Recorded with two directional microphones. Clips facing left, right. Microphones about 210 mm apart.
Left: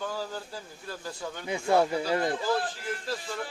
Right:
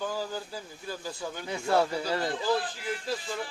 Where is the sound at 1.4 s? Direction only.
10° left (ahead or behind).